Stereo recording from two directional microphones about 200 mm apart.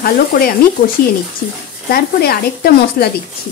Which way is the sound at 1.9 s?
50° left (ahead or behind).